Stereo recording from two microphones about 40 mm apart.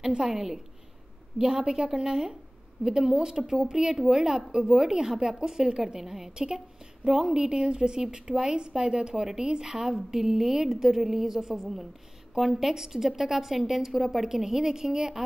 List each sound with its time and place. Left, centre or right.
0.0 s a woman's voice: centre